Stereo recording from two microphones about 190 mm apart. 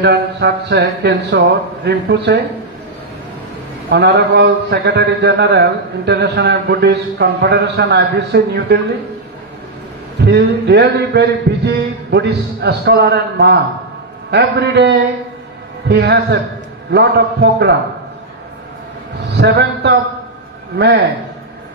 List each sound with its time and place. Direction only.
0.0 s a man's voice: 60° right (ahead or behind)
3.9 s a man's voice: 60° right (ahead or behind)
10.2 s a man's voice: 60° right (ahead or behind)
19.2 s a man's voice: 60° right (ahead or behind)